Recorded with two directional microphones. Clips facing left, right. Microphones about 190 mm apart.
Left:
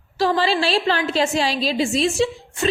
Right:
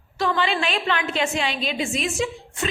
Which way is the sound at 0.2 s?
35° left (ahead or behind).